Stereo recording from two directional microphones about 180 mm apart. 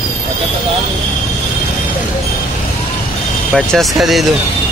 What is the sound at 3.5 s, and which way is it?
Speech, centre (ahead or behind).